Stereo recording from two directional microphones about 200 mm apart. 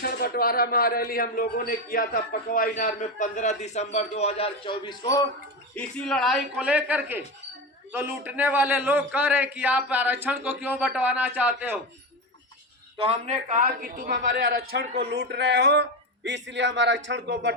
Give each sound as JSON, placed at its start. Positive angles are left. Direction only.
{"t": 0.0, "sound": "a man's voice", "side_deg": 50}
{"t": 5.7, "sound": "a man's voice", "side_deg": 5}
{"t": 13.0, "sound": "a man's voice", "side_deg": -30}